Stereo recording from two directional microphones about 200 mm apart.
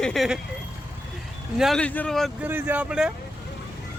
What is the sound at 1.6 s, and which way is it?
Speech, centre (ahead or behind).